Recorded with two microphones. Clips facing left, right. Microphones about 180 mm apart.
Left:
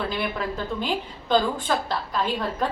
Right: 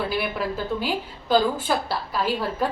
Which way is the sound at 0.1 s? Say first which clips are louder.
Right 2 dB; 5° right (ahead or behind).